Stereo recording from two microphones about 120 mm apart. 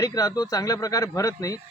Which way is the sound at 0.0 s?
30° left (ahead or behind).